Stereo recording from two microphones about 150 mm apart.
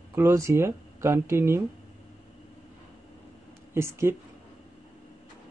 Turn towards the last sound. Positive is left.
turn(degrees=-20)  # may be behind; listen again after turning